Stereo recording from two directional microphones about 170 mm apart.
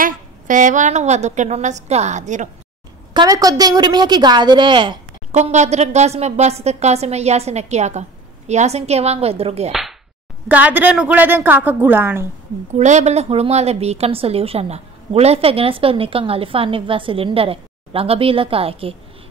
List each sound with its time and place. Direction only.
0.0 s a woman's voice: 50° right (ahead or behind)
3.1 s a woman's voice: 25° right (ahead or behind)
5.3 s a woman's voice: 45° right (ahead or behind)
9.7 s whip: centre (ahead or behind)
10.5 s a woman's voice: 10° right (ahead or behind)
12.7 s a woman's voice: 45° right (ahead or behind)